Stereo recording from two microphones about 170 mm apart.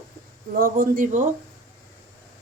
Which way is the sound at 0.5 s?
55° right (ahead or behind).